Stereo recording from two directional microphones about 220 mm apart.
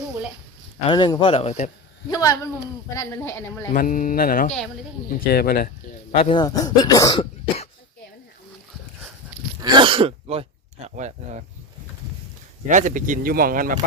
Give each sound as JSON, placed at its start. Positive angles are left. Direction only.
{"t": 0.9, "sound": "speech", "side_deg": 20}
{"t": 2.0, "sound": "a woman's voice", "side_deg": 15}
{"t": 3.7, "sound": "speech", "side_deg": 35}
{"t": 6.1, "sound": "speech", "side_deg": 25}
{"t": 9.6, "sound": "throat clearing", "side_deg": -20}
{"t": 10.8, "sound": "speech", "side_deg": -30}
{"t": 12.6, "sound": "speech", "side_deg": -35}